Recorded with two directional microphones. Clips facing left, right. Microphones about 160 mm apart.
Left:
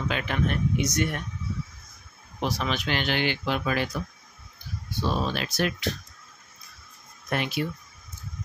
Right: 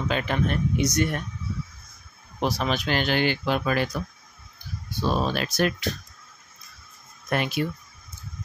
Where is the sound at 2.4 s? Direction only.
40° right (ahead or behind).